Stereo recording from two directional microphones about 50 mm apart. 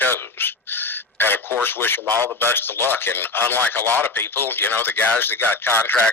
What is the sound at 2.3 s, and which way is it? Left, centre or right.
Speech, left.